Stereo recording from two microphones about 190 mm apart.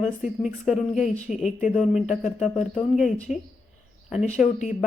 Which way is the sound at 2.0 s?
40° left (ahead or behind).